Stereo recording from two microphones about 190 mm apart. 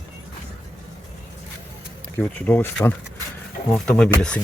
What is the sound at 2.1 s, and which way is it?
Speech, 10° left (ahead or behind).